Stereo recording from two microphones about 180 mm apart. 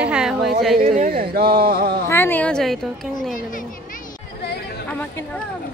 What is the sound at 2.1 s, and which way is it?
Speech, 10° left (ahead or behind).